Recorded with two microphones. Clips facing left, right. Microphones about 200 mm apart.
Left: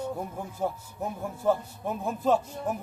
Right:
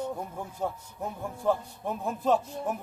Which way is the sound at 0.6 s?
5° left (ahead or behind).